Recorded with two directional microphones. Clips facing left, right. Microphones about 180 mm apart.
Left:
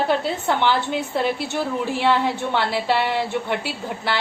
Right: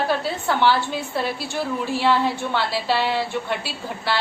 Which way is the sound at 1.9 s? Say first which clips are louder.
Right 1 dB; 15° left (ahead or behind).